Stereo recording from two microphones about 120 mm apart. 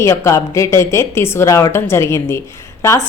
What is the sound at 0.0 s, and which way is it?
A woman's voice, 25° left (ahead or behind).